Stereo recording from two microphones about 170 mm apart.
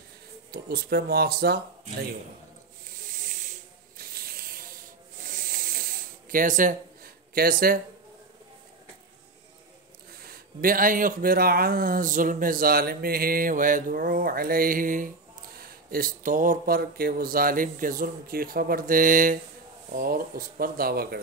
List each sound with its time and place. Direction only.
0.5 s speech: 65° right (ahead or behind)
3.0 s ratchet: 50° right (ahead or behind)
5.2 s a sound: 55° right (ahead or behind)
10.6 s speech: 55° right (ahead or behind)